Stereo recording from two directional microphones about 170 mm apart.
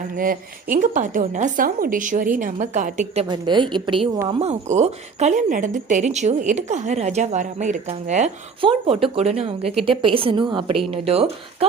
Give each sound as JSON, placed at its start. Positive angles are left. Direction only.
{"t": 0.2, "sound": "a woman's voice", "side_deg": -55}
{"t": 3.2, "sound": "a woman's voice", "side_deg": -25}
{"t": 4.3, "sound": "a woman's voice", "side_deg": -40}
{"t": 8.6, "sound": "a woman's voice", "side_deg": -30}